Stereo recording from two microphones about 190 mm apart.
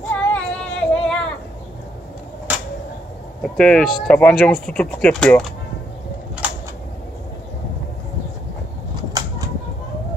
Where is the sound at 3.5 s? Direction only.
5° left (ahead or behind).